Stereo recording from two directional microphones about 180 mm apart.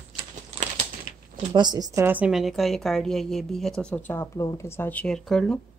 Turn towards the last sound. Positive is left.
turn(degrees=5)  # may be behind; listen again after turning